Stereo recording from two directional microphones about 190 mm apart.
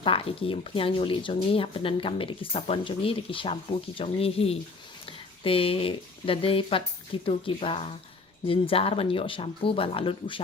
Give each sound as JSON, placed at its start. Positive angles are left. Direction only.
{"t": 0.0, "sound": "speech", "side_deg": 30}